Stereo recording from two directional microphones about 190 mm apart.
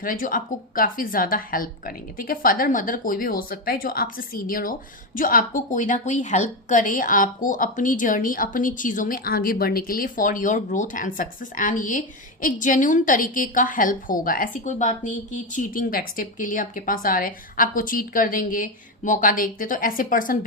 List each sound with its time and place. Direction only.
0.0 s a woman's voice: 45° left (ahead or behind)